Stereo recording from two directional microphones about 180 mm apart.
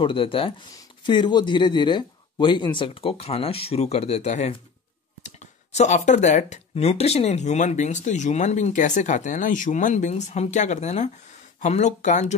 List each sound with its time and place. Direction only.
0.0 s speech: 30° left (ahead or behind)